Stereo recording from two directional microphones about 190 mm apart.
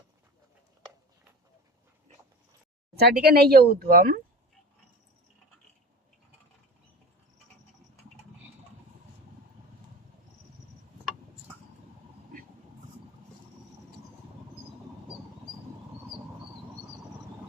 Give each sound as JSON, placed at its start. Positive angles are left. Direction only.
{"t": 3.0, "sound": "speech", "side_deg": -55}